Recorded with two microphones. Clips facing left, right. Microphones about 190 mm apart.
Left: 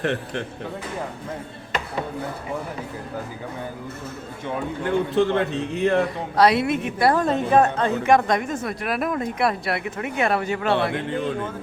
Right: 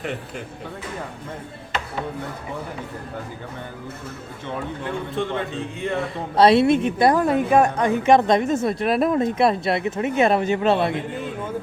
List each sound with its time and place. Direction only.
0.0 s speech: 75° left (ahead or behind)
5.1 s speech: 70° left (ahead or behind)
6.3 s a woman's voice: 25° right (ahead or behind)
7.1 s a woman's voice: 10° right (ahead or behind)